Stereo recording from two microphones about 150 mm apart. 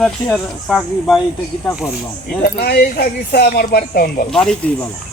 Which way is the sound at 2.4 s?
90° left.